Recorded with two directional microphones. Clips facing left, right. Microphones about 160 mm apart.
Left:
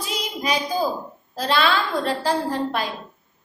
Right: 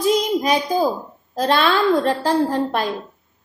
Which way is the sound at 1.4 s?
45° right (ahead or behind).